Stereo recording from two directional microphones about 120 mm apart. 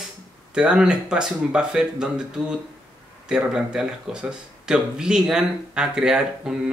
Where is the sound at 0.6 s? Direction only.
5° right (ahead or behind).